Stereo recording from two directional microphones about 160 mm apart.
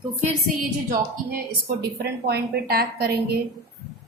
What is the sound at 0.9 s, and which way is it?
A woman's voice, 65° right (ahead or behind).